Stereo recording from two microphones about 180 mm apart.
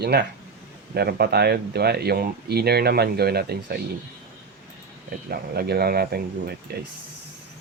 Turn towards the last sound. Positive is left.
turn(degrees=-60)  # may be behind; listen again after turning